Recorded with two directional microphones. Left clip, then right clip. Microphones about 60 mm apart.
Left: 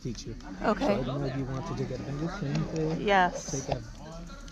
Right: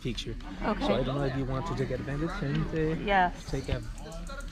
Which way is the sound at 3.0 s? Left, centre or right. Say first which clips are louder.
Left 3 dB; left.